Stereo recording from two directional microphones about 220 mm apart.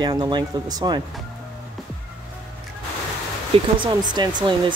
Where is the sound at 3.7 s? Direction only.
20° right (ahead or behind).